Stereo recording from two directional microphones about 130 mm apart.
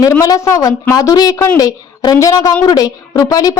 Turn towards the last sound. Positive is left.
turn(degrees=30)  # may be behind; listen again after turning